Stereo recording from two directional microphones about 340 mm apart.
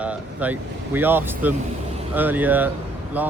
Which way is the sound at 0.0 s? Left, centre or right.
Centre.